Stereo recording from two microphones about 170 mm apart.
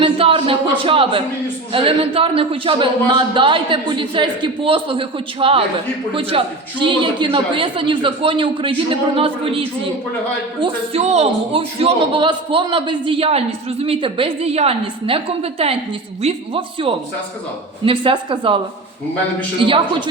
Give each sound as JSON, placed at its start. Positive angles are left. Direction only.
{"t": 0.0, "sound": "a sound", "side_deg": -30}
{"t": 0.8, "sound": "a man's voice", "side_deg": -30}
{"t": 19.6, "sound": "a man's voice", "side_deg": -30}